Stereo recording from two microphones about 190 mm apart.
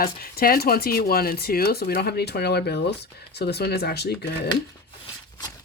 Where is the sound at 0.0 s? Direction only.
50° left (ahead or behind).